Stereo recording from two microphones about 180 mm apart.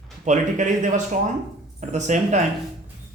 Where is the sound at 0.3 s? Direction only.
45° right (ahead or behind).